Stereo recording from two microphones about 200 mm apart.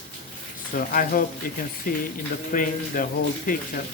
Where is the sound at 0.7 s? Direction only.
45° left (ahead or behind).